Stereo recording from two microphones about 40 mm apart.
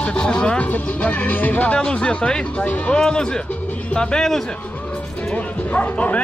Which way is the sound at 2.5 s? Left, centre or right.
Left.